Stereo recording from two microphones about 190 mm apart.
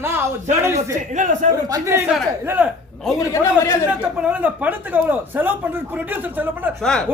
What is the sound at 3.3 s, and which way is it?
Speech, 15° left (ahead or behind).